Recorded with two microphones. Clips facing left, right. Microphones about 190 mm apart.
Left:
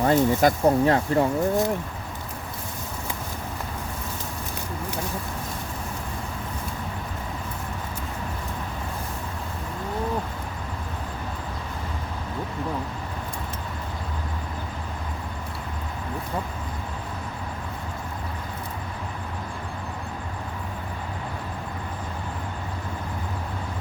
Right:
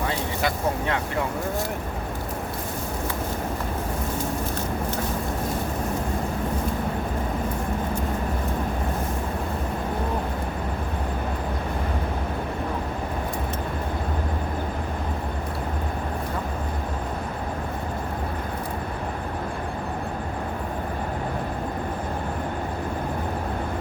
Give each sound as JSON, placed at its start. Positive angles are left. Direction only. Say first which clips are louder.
{"t": 0.1, "sound": "speech", "louder": "left 7 dB", "side_deg": 40}